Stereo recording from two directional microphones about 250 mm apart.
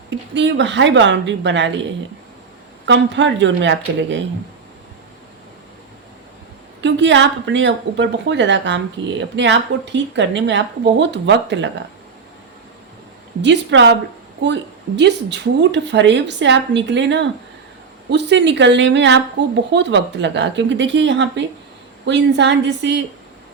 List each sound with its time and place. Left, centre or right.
0.3 s speech: right
2.8 s speech: right
6.8 s speech: right
13.4 s speech: right